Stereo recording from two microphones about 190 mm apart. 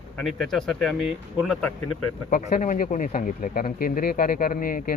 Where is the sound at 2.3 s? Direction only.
40° left (ahead or behind).